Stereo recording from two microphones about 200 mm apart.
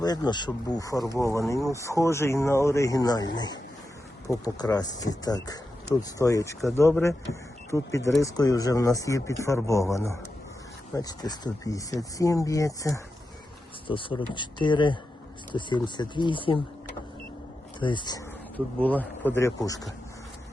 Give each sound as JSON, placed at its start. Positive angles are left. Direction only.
{"t": 0.0, "sound": "speech", "side_deg": 20}
{"t": 17.7, "sound": "speech", "side_deg": 25}
{"t": 18.5, "sound": "speech", "side_deg": 10}